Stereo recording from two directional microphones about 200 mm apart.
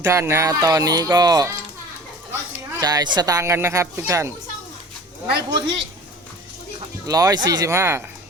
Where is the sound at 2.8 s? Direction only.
20° right (ahead or behind).